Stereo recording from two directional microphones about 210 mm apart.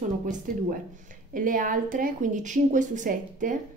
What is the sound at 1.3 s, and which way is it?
A woman's voice, 40° right (ahead or behind).